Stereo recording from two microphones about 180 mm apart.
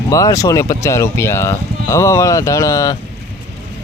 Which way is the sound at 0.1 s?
20° left (ahead or behind).